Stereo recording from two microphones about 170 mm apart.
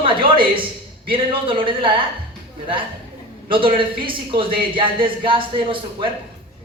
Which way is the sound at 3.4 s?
30° right (ahead or behind).